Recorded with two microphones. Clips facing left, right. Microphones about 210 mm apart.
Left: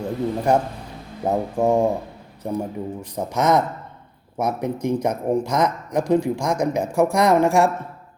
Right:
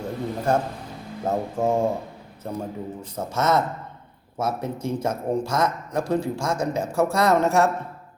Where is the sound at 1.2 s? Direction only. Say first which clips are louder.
Left 3 dB; 15° left (ahead or behind).